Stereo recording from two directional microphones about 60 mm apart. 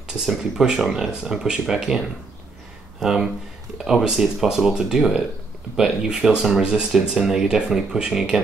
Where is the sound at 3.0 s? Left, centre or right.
Centre.